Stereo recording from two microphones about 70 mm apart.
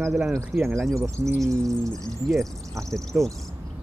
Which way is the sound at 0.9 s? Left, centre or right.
Right.